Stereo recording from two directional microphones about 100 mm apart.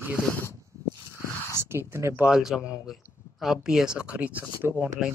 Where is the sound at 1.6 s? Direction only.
25° right (ahead or behind).